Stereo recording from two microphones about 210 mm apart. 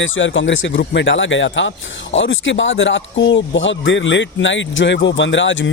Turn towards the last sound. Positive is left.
turn(degrees=60)  # may be behind; listen again after turning